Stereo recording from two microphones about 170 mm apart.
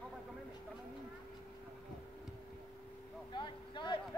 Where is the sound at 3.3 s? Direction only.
25° left (ahead or behind).